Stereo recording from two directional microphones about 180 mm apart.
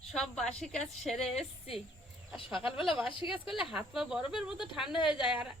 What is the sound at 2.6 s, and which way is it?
Speech, 5° right (ahead or behind).